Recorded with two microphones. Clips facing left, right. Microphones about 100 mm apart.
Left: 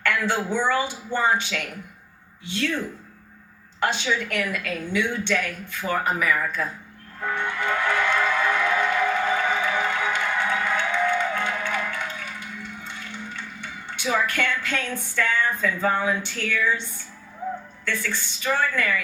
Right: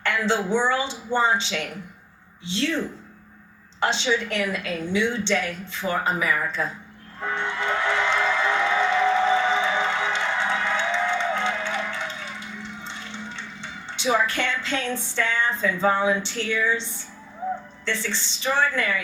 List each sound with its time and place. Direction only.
0.0 s a woman's voice: 20° right (ahead or behind)
7.2 s music: 25° right (ahead or behind)
17.8 s a woman's voice: 25° right (ahead or behind)